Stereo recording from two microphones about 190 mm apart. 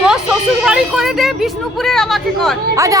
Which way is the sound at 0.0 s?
Centre (ahead or behind).